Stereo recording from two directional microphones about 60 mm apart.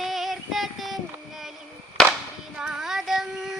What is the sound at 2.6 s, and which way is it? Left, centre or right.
Child singing, centre.